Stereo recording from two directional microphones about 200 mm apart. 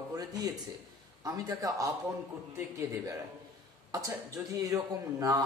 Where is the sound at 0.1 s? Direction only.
20° right (ahead or behind).